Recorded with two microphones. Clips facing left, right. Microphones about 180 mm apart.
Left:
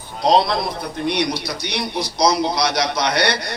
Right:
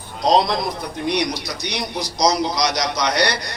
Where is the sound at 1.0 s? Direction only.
60° left (ahead or behind).